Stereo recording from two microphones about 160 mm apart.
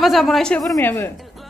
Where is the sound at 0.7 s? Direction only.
15° left (ahead or behind).